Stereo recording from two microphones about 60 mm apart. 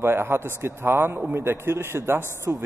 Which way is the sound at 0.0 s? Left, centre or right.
Right.